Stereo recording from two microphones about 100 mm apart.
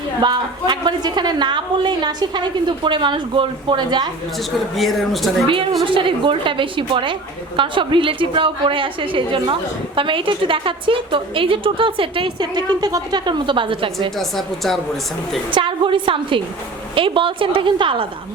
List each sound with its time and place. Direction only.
0.2 s a woman's voice: 50° right (ahead or behind)
4.8 s a woman's voice: centre (ahead or behind)
5.8 s a woman's voice: 55° right (ahead or behind)
14.2 s a woman's voice: centre (ahead or behind)
15.5 s a woman's voice: 55° right (ahead or behind)